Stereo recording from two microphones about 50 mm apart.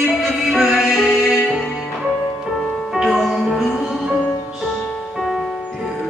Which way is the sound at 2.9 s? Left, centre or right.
Centre.